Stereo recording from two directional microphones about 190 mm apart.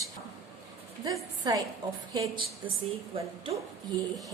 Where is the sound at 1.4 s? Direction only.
20° right (ahead or behind).